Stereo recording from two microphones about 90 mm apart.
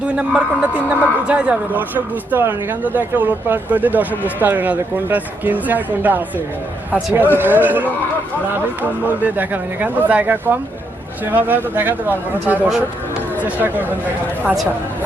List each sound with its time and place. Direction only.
0.0 s a man's voice: 10° right (ahead or behind)